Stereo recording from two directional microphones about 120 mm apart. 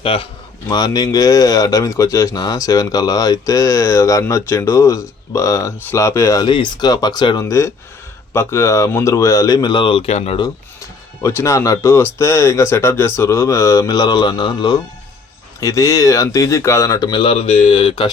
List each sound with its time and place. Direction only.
0.0 s speech: 50° left (ahead or behind)
0.7 s speech: 35° left (ahead or behind)
6.5 s speech: 40° left (ahead or behind)
10.1 s speech: 65° left (ahead or behind)
11.2 s speech: 25° left (ahead or behind); by 14.8 s 40° left (ahead or behind)
15.6 s speech: 25° left (ahead or behind); by 18.1 s 45° left (ahead or behind)